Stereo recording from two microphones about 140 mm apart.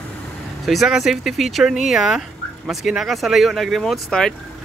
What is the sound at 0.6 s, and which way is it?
Speech, centre (ahead or behind).